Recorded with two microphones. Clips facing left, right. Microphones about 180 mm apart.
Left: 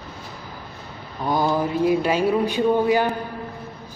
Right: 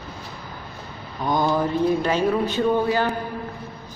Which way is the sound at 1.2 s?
10° left (ahead or behind).